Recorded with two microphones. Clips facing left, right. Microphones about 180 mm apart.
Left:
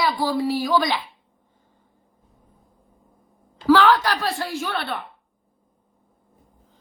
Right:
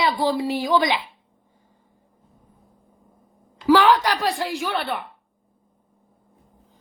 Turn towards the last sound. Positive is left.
turn(degrees=-15)  # may be behind; listen again after turning